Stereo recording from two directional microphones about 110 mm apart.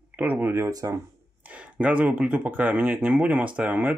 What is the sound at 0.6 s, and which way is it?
Speech, 30° right (ahead or behind).